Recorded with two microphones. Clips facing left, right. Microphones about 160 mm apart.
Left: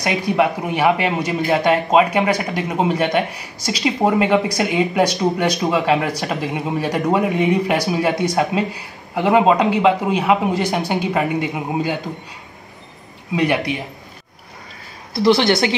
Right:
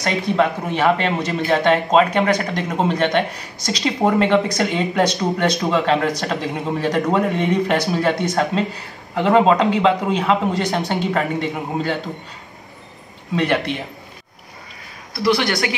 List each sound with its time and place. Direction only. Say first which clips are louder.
0.0 s speech: left 1 dB; 10° left (ahead or behind)
13.3 s speech: left 1 dB; 10° left (ahead or behind)
15.1 s a woman's voice: left 4 dB; 25° left (ahead or behind)